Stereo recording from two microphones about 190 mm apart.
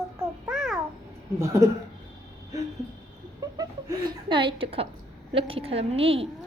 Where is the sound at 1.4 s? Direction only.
15° right (ahead or behind).